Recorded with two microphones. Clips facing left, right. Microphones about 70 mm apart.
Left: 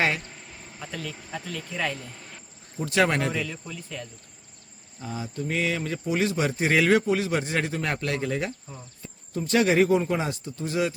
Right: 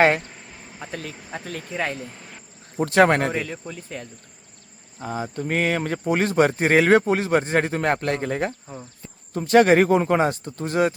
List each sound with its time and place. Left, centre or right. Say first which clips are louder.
0.8 s a man's voice: right 2 dB; right
2.7 s a man's voice: right 6 dB; right
3.0 s a man's voice: right 6 dB; right